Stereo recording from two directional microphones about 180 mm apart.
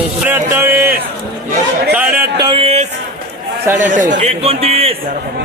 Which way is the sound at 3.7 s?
15° right (ahead or behind).